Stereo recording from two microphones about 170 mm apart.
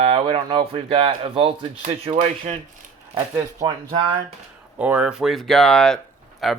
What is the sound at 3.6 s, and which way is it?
Speech, 25° right (ahead or behind).